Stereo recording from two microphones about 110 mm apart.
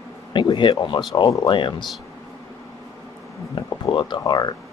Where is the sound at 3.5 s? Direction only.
45° left (ahead or behind).